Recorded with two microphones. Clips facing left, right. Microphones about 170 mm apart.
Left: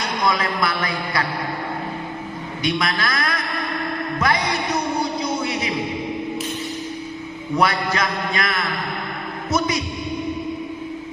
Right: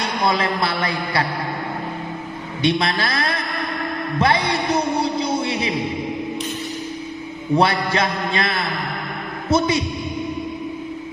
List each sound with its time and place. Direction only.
0.0 s a man's voice: 30° right (ahead or behind)
2.6 s a man's voice: 30° right (ahead or behind)
4.2 s music: 30° right (ahead or behind)
7.5 s a man's voice: 30° right (ahead or behind)